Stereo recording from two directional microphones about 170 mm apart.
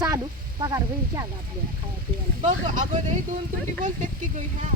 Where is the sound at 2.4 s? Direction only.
50° right (ahead or behind).